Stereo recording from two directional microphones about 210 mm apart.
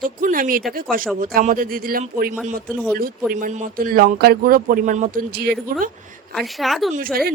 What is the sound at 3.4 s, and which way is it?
Speech, 40° right (ahead or behind).